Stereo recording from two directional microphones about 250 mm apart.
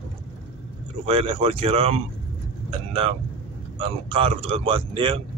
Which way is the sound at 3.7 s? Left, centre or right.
Right.